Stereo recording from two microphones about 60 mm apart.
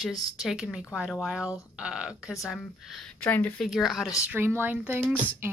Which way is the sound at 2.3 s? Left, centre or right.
Centre.